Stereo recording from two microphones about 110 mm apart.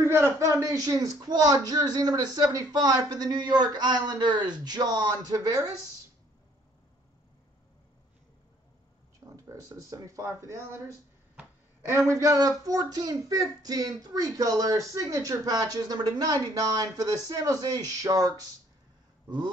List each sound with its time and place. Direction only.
0.0 s a man's voice: 20° right (ahead or behind)
0.5 s speech: 30° right (ahead or behind)
9.2 s speech: 30° right (ahead or behind)
12.1 s speech: 35° right (ahead or behind)